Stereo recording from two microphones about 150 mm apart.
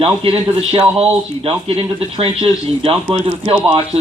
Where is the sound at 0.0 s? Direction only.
40° right (ahead or behind).